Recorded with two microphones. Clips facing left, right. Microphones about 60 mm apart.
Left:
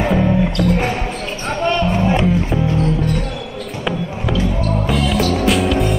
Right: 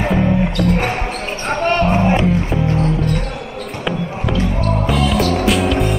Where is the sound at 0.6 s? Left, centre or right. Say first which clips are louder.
Even; right.